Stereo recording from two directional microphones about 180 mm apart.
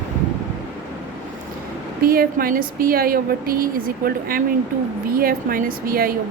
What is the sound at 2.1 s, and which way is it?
Speech, 55° right (ahead or behind).